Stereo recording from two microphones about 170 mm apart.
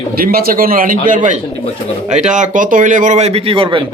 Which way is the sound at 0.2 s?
60° right (ahead or behind).